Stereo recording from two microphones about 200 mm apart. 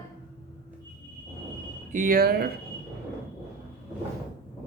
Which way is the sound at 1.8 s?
40° right (ahead or behind).